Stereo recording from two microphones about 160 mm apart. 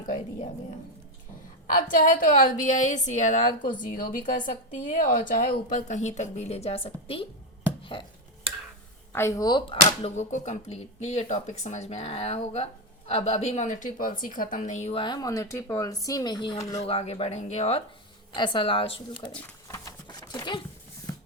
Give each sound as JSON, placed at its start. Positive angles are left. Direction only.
{"t": 1.7, "sound": "a woman's voice", "side_deg": 55}
{"t": 9.1, "sound": "speech", "side_deg": 20}
{"t": 9.8, "sound": "a woman's voice", "side_deg": 45}
{"t": 15.0, "sound": "speech", "side_deg": 25}
{"t": 16.8, "sound": "speech", "side_deg": 40}
{"t": 18.3, "sound": "speech", "side_deg": 30}
{"t": 19.6, "sound": "a sound", "side_deg": 20}